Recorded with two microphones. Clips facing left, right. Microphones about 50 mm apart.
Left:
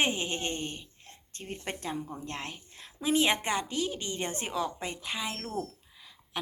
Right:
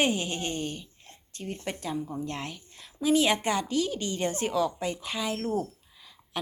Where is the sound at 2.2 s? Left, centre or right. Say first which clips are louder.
Right 3 dB; left.